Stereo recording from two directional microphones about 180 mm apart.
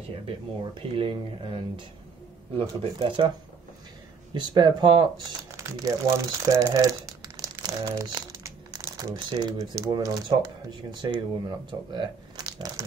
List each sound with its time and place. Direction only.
0.7 s speech: 30° right (ahead or behind)
5.6 s speech: 15° right (ahead or behind)